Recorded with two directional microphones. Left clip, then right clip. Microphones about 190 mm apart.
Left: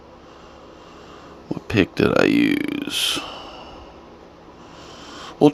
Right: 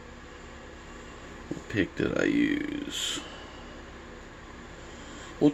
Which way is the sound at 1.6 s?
50° left (ahead or behind).